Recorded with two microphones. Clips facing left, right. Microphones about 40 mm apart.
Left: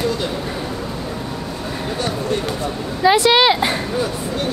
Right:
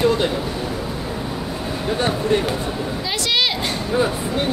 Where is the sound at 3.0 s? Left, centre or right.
Left.